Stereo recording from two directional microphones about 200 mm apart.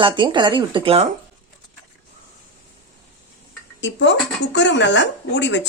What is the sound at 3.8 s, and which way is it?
Speech, 65° left (ahead or behind).